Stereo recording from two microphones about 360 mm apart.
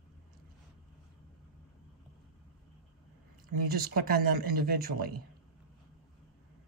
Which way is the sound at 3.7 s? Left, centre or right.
Right.